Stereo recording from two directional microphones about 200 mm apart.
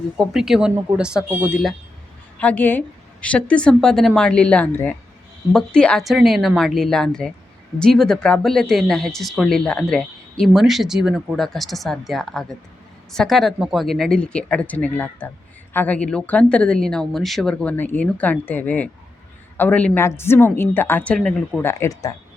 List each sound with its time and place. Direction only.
0.2 s speech: centre (ahead or behind)
2.4 s speech: 10° left (ahead or behind)